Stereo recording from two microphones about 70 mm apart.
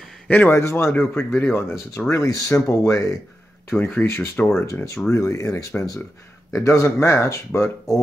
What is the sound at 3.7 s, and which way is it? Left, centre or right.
Speech, left.